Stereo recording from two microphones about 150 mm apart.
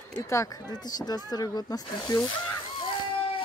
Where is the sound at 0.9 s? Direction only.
25° left (ahead or behind).